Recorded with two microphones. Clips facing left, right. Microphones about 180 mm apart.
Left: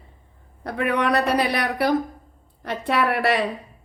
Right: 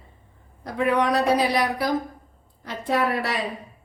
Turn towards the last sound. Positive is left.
turn(degrees=65)  # may be behind; listen again after turning